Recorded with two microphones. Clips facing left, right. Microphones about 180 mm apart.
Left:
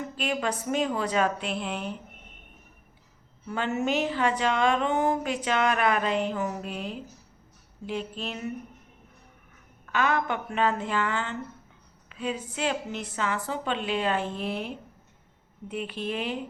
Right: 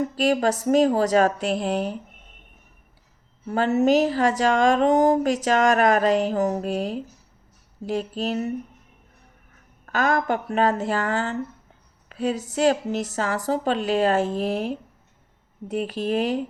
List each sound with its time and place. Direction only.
0.0 s speech: 40° right (ahead or behind)
3.4 s speech: 40° right (ahead or behind)
9.8 s speech: 40° right (ahead or behind)
12.0 s a sound: 40° right (ahead or behind)
12.5 s speech: 40° right (ahead or behind)